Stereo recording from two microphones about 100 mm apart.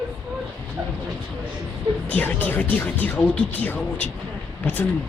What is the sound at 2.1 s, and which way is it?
Speech, 20° left (ahead or behind).